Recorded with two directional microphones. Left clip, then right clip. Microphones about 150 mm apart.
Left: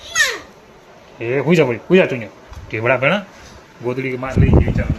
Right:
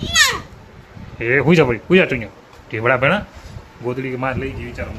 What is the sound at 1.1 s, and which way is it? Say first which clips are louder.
Speech: right 1 dB; 20° right (ahead or behind).